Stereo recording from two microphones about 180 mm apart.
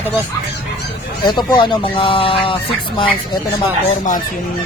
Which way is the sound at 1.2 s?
25° left (ahead or behind).